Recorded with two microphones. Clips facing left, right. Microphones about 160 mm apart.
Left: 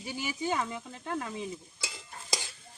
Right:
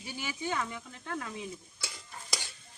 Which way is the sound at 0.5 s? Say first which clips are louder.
Left 2 dB; 25° left (ahead or behind).